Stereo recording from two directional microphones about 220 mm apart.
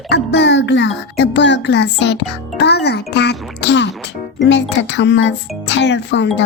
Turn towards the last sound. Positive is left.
turn(degrees=50)  # may be behind; listen again after turning